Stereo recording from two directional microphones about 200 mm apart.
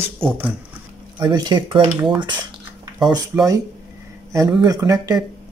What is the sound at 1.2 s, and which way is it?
Speech, 20° right (ahead or behind).